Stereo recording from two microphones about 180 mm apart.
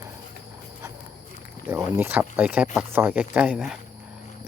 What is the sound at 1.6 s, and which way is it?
Speech, 15° right (ahead or behind).